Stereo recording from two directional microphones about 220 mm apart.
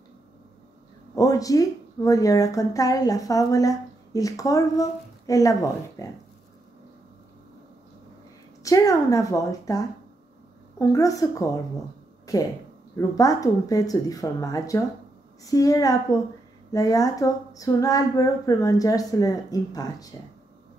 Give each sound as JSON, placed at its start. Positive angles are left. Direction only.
{"t": 1.1, "sound": "speech", "side_deg": 15}
{"t": 8.6, "sound": "speech", "side_deg": 15}
{"t": 10.9, "sound": "speech", "side_deg": 15}